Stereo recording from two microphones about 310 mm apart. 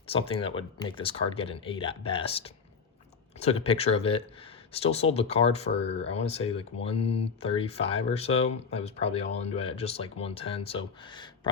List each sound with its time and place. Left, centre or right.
0.1 s speech: centre